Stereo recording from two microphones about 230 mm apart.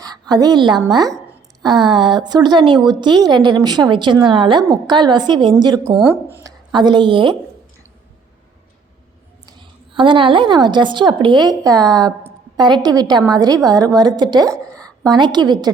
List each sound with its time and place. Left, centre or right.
0.0 s a woman's voice: centre
9.5 s a woman's voice: right